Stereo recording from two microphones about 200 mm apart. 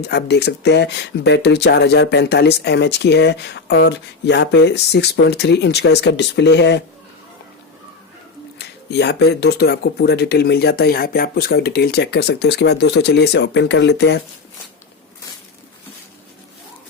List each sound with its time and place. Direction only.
0.1 s speech: 55° left (ahead or behind)
8.5 s speech: 55° left (ahead or behind)